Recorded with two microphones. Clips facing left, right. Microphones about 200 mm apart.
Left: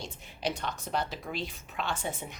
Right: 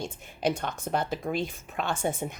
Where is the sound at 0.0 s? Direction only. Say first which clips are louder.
Right 6 dB; 50° right (ahead or behind).